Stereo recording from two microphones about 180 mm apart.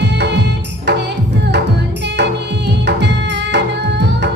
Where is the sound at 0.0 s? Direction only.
70° right (ahead or behind).